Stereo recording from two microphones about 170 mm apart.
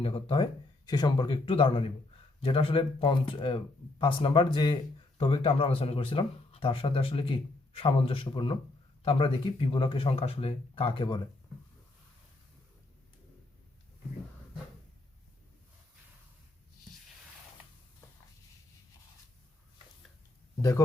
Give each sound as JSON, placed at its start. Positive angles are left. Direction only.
{"t": 0.0, "sound": "speech", "side_deg": 35}
{"t": 20.6, "sound": "speech", "side_deg": 20}